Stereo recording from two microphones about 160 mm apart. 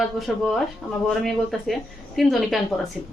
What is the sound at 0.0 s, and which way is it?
A woman's voice, centre (ahead or behind).